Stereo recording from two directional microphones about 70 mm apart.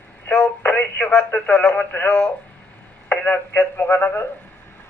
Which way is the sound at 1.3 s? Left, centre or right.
Centre.